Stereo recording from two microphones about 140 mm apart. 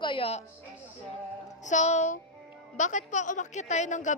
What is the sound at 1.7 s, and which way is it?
A woman's voice, 55° left (ahead or behind).